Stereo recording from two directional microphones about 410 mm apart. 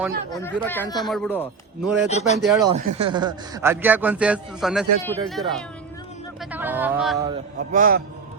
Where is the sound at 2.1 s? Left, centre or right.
Centre.